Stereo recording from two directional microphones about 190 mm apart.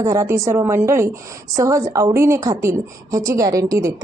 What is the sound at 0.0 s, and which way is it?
Speech, 15° right (ahead or behind).